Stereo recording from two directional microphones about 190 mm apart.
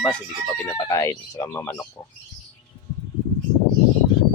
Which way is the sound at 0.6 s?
15° left (ahead or behind).